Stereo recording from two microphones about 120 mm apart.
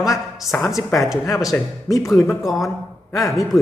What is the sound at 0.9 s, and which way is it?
Speech, centre (ahead or behind).